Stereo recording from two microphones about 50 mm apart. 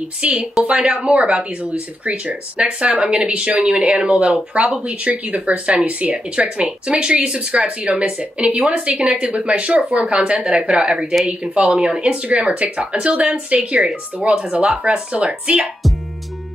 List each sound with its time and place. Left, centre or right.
0.2 s speech: right
9.0 s speech: centre